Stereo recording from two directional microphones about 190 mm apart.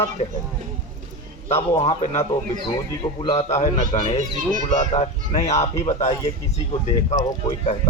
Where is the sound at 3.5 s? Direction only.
35° left (ahead or behind).